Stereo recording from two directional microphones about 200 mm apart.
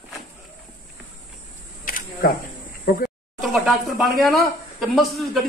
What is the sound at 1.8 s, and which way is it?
Camera, 45° left (ahead or behind).